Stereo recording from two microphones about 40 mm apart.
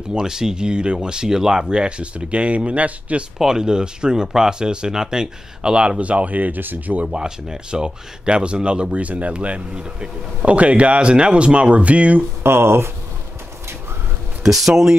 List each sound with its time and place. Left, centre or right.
0.1 s speech: centre; by 3.3 s right
3.3 s speech: centre; by 7.0 s right
7.0 s speech: right
8.9 s speech: right
12.4 s speech: right
14.4 s speech: centre